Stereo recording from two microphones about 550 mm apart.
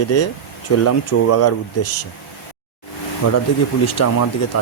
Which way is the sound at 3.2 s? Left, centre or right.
Left.